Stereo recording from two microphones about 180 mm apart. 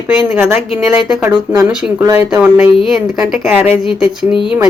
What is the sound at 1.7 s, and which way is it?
Speech, 5° right (ahead or behind).